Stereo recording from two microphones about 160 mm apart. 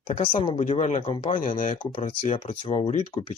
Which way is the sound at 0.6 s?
50° left (ahead or behind).